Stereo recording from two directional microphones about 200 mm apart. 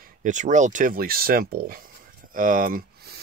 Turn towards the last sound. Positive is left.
turn(degrees=-45)  # may be behind; listen again after turning